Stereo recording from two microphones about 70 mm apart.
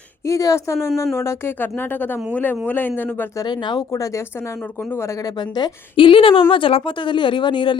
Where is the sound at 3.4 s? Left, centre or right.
Left.